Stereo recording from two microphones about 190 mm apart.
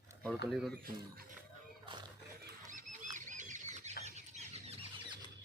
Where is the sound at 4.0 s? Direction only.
35° right (ahead or behind).